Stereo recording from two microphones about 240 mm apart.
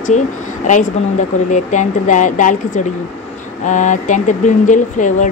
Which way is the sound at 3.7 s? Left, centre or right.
Left.